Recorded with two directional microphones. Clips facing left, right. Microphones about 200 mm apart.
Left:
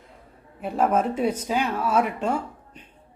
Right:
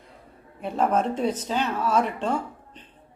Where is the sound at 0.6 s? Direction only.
10° left (ahead or behind).